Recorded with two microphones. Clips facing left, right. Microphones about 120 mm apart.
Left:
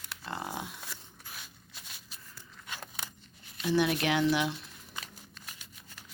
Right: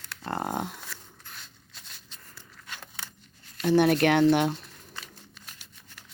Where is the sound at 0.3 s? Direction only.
50° right (ahead or behind).